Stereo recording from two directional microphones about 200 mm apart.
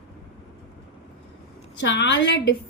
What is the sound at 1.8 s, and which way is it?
Speech, 65° left (ahead or behind).